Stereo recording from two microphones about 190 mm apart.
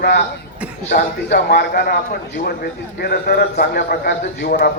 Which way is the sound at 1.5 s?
60° left (ahead or behind).